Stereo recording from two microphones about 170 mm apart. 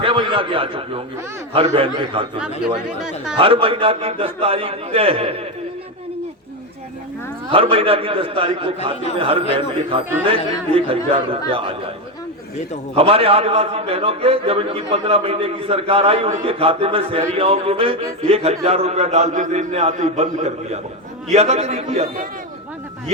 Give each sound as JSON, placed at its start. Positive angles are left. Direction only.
{"t": 0.0, "sound": "a man's voice", "side_deg": -30}
{"t": 7.5, "sound": "a man's voice", "side_deg": -35}
{"t": 13.0, "sound": "a man's voice", "side_deg": -35}